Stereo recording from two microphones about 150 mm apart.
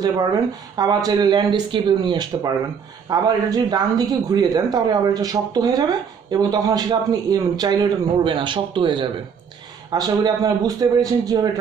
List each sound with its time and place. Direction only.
0.0 s a man's voice: 25° right (ahead or behind)